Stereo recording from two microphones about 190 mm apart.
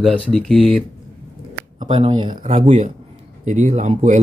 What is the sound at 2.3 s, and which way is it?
Speech, 45° right (ahead or behind).